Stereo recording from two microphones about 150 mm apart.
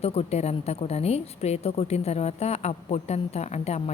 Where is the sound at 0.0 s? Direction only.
45° left (ahead or behind).